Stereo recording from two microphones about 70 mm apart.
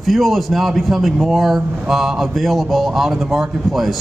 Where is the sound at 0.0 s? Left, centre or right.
Centre.